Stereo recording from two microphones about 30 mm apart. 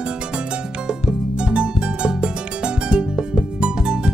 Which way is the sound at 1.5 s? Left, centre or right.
Right.